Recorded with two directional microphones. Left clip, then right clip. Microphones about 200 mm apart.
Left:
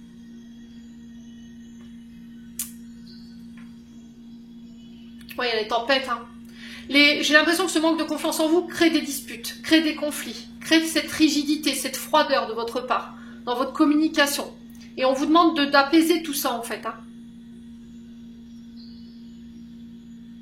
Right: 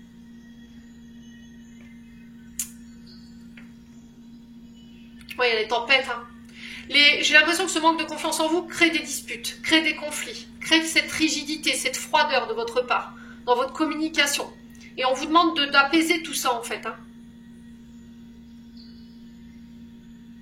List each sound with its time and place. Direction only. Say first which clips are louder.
5.3 s a woman's voice: right 2 dB; 50° left (ahead or behind)